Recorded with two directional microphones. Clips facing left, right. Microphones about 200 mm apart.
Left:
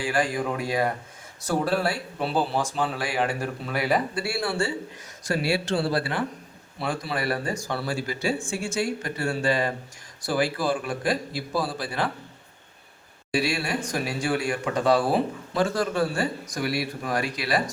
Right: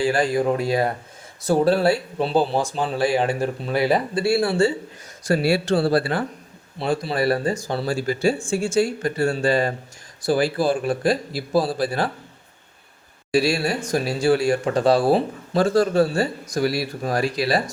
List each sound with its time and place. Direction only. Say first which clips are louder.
0.0 s speech: right 6 dB; 25° right (ahead or behind)
5.3 s speech: right 6 dB; 35° right (ahead or behind)
6.7 s speech: right 6 dB; 25° right (ahead or behind)
13.3 s speech: right 6 dB; 35° right (ahead or behind)